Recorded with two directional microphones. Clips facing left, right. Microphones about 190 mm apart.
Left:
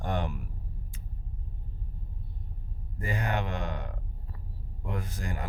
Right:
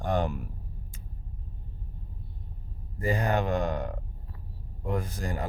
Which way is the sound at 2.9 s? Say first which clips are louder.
Right 5 dB; 40° right (ahead or behind).